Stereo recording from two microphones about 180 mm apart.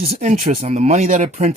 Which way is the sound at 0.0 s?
40° right (ahead or behind).